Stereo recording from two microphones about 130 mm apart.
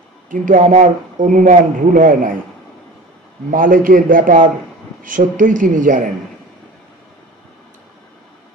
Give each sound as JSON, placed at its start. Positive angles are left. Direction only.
{"t": 0.3, "sound": "a man's voice", "side_deg": -85}
{"t": 3.4, "sound": "speech", "side_deg": -90}